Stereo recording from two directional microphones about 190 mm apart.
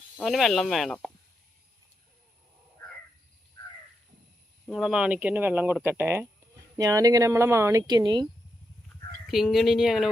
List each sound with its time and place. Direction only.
0.2 s speech: centre (ahead or behind)
4.6 s speech: centre (ahead or behind); by 8.3 s 20° right (ahead or behind)
9.2 s speech: centre (ahead or behind)